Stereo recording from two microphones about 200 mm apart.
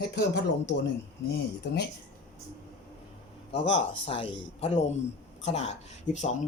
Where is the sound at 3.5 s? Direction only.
30° left (ahead or behind).